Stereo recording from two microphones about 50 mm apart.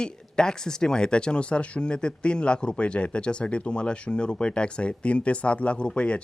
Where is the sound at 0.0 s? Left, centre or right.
Centre.